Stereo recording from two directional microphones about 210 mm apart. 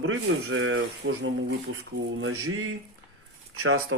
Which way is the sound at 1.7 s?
60° right (ahead or behind).